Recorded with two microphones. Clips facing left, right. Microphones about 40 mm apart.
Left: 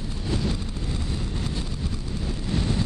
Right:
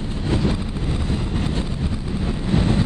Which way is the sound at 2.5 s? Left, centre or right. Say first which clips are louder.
Right 7 dB; right.